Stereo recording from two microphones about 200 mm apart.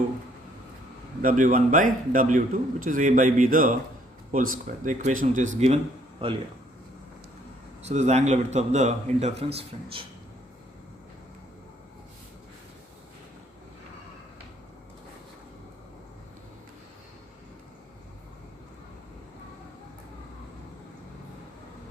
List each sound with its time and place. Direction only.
1.2 s a man's voice: 40° right (ahead or behind)
7.8 s a man's voice: 35° right (ahead or behind)